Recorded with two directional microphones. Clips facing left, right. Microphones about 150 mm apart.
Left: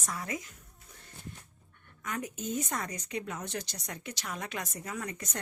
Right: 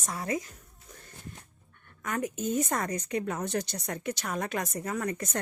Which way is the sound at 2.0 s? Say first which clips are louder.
Right 5 dB; 50° right (ahead or behind).